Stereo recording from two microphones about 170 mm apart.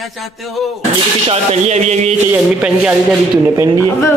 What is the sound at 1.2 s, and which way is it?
Speech, 40° right (ahead or behind).